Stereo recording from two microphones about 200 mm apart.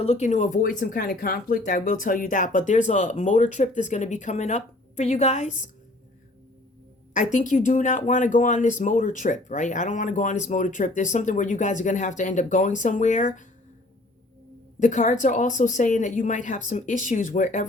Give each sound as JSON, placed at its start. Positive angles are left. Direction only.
{"t": 0.0, "sound": "speech", "side_deg": 35}
{"t": 7.1, "sound": "speech", "side_deg": 40}
{"t": 14.8, "sound": "speech", "side_deg": 40}